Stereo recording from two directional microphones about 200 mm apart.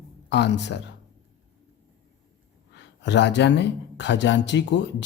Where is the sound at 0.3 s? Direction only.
60° left (ahead or behind).